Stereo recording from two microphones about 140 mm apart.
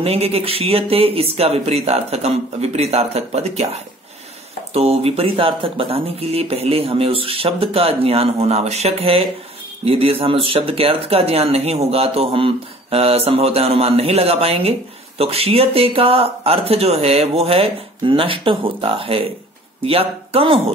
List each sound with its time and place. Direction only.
0.0 s speech: 45° right (ahead or behind)